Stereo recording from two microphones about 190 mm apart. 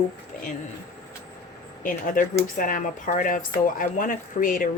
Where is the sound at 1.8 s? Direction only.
45° left (ahead or behind).